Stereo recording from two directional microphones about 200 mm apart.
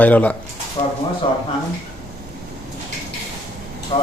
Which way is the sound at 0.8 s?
30° left (ahead or behind).